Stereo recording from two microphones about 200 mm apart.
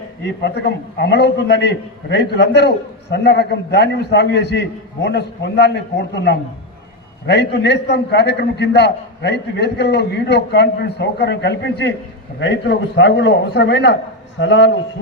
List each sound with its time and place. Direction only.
0.3 s a man's voice: 60° left (ahead or behind)